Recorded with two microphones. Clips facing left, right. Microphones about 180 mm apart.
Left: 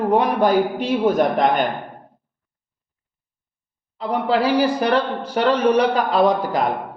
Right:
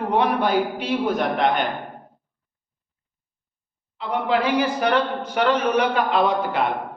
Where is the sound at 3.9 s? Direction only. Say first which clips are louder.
Left 2 dB; 35° left (ahead or behind).